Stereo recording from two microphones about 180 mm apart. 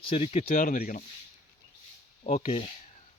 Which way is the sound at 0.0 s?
30° left (ahead or behind).